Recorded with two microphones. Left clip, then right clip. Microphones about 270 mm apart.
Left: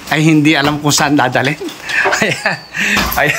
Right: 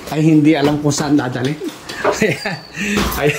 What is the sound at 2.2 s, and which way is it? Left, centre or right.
Speech, centre.